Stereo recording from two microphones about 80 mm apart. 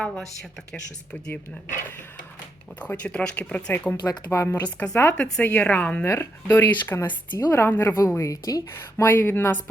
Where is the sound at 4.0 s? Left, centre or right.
Left.